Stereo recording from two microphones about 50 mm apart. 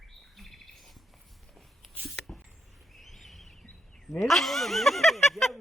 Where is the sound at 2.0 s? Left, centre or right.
Centre.